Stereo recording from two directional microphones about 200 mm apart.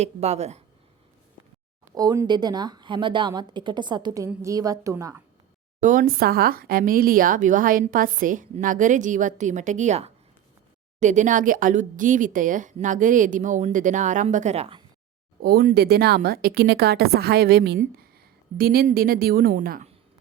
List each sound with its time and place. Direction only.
0.0 s speech: 35° right (ahead or behind)
2.0 s a woman's voice: 20° right (ahead or behind)
5.8 s speech: 40° right (ahead or behind)
15.4 s a woman's voice: 50° right (ahead or behind)